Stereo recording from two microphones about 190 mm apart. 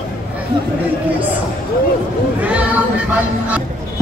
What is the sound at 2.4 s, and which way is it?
Choir, 10° right (ahead or behind).